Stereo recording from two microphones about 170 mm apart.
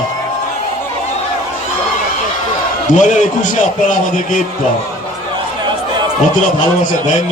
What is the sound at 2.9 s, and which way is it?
Speech, 45° left (ahead or behind).